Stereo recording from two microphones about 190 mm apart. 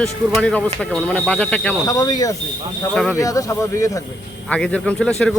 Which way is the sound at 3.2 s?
15° left (ahead or behind).